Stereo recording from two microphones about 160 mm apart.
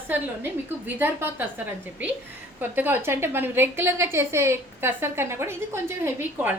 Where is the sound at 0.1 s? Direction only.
10° right (ahead or behind).